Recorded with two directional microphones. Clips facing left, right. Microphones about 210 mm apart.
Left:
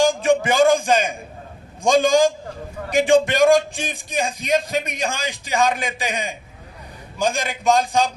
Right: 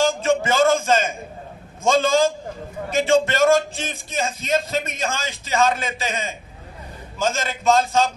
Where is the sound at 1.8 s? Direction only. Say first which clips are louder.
Left 2 dB; 15° left (ahead or behind).